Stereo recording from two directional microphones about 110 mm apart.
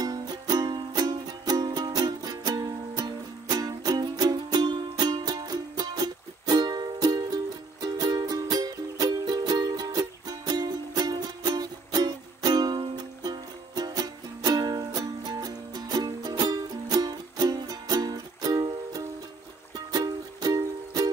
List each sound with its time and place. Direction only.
0.0 s music: 35° right (ahead or behind)